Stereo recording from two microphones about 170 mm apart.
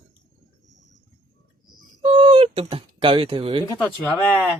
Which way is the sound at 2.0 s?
30° right (ahead or behind).